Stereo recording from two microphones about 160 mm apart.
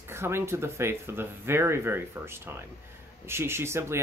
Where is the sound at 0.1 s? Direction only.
15° right (ahead or behind).